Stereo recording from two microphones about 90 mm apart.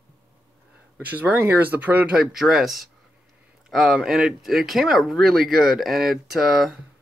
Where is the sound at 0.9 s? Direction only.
20° right (ahead or behind); by 6.8 s centre (ahead or behind).